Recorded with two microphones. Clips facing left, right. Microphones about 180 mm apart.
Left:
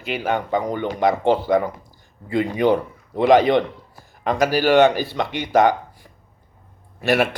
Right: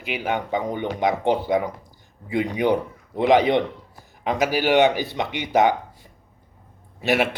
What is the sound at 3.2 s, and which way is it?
Speech, 20° right (ahead or behind).